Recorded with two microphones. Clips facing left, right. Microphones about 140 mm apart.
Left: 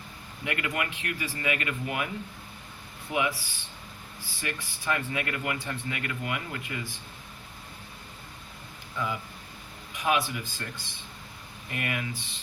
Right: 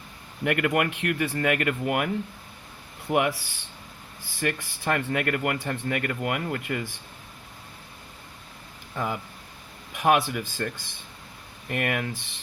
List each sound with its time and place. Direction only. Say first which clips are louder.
0.4 s speech: right 8 dB; 55° right (ahead or behind)
3.1 s speech: right 5 dB; 60° right (ahead or behind)
9.9 s speech: right 5 dB; 60° right (ahead or behind)
11.7 s speech: right 5 dB; 55° right (ahead or behind)